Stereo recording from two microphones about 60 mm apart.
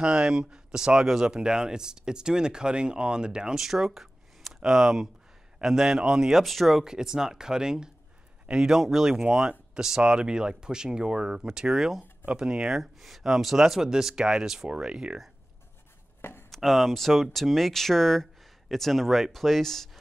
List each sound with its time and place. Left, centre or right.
0.0 s speech: centre
16.2 s a sound: left
16.4 s speech: centre